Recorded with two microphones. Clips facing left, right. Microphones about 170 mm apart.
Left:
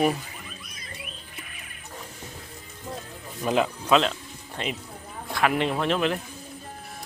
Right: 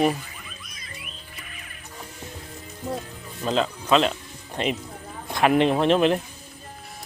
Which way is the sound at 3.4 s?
10° left (ahead or behind).